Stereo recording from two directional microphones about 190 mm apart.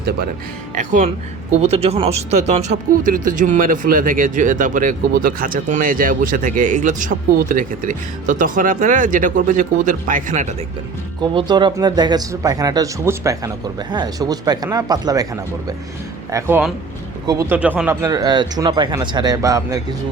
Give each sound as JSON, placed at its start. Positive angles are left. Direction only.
{"t": 0.8, "sound": "speech", "side_deg": -40}
{"t": 11.2, "sound": "speech", "side_deg": -25}
{"t": 18.1, "sound": "speech", "side_deg": -20}